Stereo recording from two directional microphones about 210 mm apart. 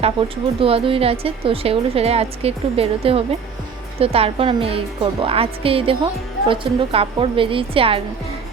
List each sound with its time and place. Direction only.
0.0 s a woman's voice: 25° right (ahead or behind)